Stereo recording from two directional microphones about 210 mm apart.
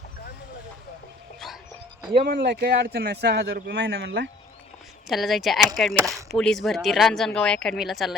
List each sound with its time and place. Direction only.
2.2 s a man's voice: 50° right (ahead or behind)
5.0 s speech: centre (ahead or behind)
6.0 s speech: 15° right (ahead or behind)
6.3 s speech: centre (ahead or behind)